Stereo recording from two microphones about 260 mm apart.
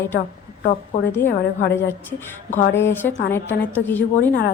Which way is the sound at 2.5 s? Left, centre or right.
Centre.